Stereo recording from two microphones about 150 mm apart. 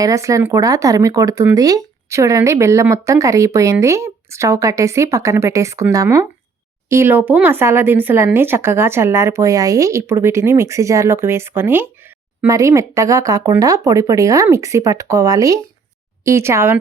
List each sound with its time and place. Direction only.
0.0 s speech: 20° right (ahead or behind)